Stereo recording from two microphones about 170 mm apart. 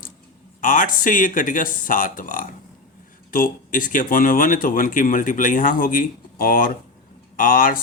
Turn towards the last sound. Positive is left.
turn(degrees=55)  # may be behind; listen again after turning